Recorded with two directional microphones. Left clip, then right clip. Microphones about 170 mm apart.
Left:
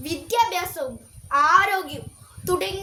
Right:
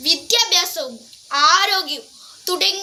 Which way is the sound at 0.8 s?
10° left (ahead or behind).